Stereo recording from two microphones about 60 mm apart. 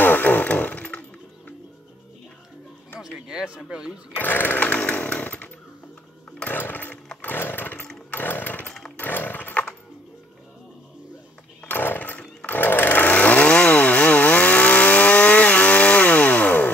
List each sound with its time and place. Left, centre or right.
0.0 s chainsaw: left
3.0 s a sound: centre
4.2 s chainsaw: left
6.5 s chainsaw: left
11.6 s chainsaw: left